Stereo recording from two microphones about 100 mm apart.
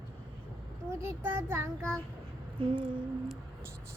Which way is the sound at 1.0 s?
25° right (ahead or behind).